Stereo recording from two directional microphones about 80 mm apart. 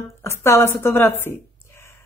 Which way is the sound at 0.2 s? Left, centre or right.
Left.